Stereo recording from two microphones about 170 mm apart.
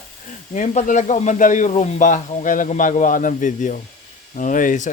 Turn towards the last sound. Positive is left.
turn(degrees=50)  # may be behind; listen again after turning